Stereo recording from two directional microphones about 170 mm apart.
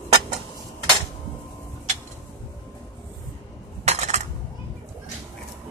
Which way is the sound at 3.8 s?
40° right (ahead or behind).